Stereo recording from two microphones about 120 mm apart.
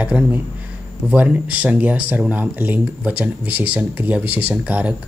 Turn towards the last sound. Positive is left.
turn(degrees=-10)  # may be behind; listen again after turning